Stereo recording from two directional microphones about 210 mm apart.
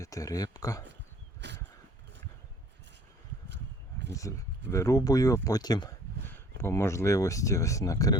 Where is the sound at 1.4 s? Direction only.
55° right (ahead or behind).